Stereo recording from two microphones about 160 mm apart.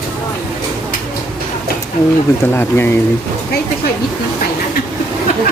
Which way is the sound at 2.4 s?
15° left (ahead or behind).